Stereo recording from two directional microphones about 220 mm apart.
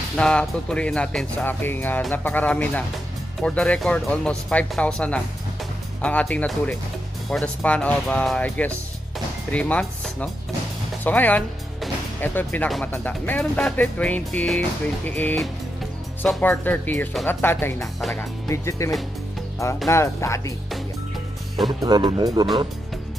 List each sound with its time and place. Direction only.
0.2 s speech: 5° left (ahead or behind)
19.9 s speech: 10° left (ahead or behind)
21.8 s speech: 20° right (ahead or behind)